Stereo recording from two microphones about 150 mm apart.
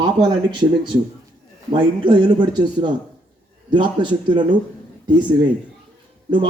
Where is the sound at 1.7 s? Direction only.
30° right (ahead or behind).